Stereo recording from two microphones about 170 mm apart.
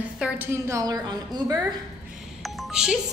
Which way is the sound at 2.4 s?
Centre (ahead or behind).